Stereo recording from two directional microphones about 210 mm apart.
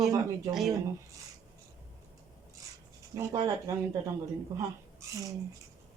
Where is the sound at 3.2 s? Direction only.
15° right (ahead or behind).